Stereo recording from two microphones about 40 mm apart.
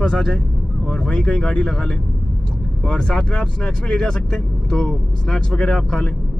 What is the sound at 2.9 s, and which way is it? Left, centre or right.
Speech, centre.